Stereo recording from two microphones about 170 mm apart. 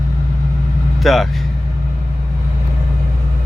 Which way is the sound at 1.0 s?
Centre (ahead or behind).